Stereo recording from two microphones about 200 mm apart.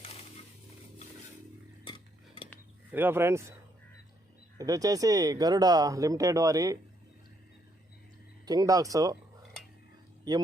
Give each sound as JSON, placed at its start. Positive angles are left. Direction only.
{"t": 2.9, "sound": "speech", "side_deg": -10}
{"t": 4.5, "sound": "speech", "side_deg": -15}
{"t": 8.4, "sound": "speech", "side_deg": -20}